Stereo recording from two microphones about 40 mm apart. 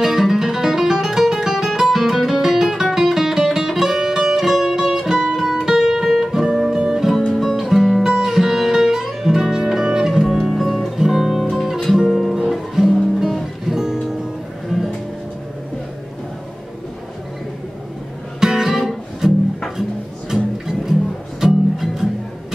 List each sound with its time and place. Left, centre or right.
0.0 s music: centre
6.0 s guitar: centre
6.9 s music: centre
18.4 s guitar: centre
21.4 s music: centre